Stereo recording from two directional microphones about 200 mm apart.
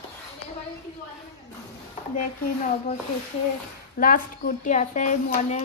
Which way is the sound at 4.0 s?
45° left (ahead or behind).